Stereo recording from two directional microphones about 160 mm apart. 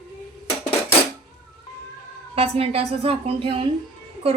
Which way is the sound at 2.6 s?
40° right (ahead or behind).